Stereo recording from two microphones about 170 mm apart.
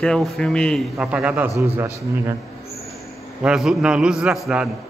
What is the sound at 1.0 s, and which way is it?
Speech, 5° right (ahead or behind).